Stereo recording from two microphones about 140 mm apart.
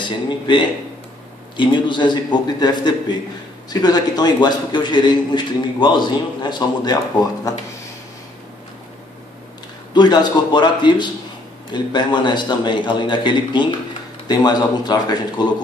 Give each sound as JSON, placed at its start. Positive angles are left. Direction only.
{"t": 0.0, "sound": "a man's voice", "side_deg": 35}
{"t": 9.9, "sound": "a man's voice", "side_deg": 30}